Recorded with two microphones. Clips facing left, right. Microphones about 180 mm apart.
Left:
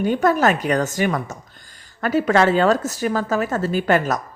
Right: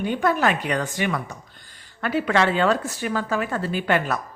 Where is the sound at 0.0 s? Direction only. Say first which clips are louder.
Left 4 dB; 45° left (ahead or behind).